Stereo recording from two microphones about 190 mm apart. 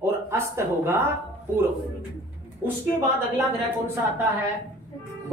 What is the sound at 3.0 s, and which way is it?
Speech, 10° right (ahead or behind).